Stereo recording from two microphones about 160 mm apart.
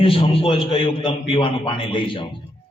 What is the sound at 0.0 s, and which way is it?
A man's voice, 35° left (ahead or behind).